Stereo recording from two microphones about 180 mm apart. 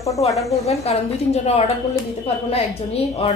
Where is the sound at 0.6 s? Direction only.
35° left (ahead or behind).